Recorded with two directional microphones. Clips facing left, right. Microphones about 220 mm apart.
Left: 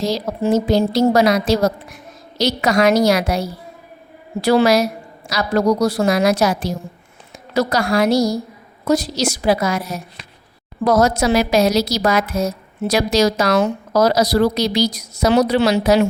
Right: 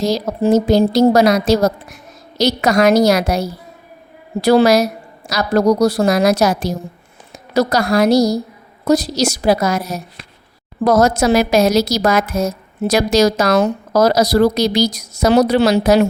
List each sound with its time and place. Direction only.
0.0 s a woman's voice: 40° right (ahead or behind)